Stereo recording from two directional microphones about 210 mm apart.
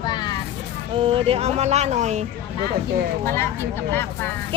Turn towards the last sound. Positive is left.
turn(degrees=10)  # may be behind; listen again after turning